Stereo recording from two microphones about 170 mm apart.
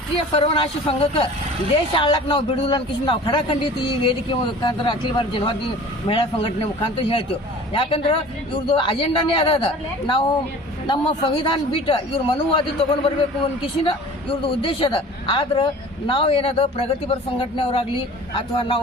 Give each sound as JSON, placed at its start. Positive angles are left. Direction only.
{"t": 0.3, "sound": "a woman's voice", "side_deg": 35}